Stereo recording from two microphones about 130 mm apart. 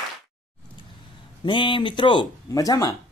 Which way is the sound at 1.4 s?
40° left (ahead or behind).